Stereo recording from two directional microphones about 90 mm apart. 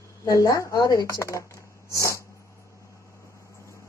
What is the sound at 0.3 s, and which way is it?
Speech, 40° left (ahead or behind).